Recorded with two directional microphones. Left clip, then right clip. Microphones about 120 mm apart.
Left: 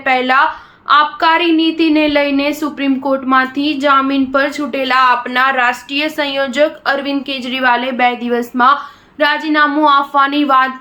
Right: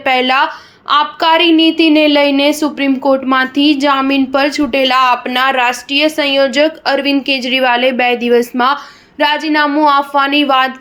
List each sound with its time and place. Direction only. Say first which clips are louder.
0.0 s a woman's voice: even; 30° right (ahead or behind)